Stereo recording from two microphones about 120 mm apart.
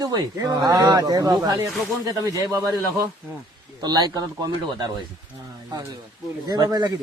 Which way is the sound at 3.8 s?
35° right (ahead or behind).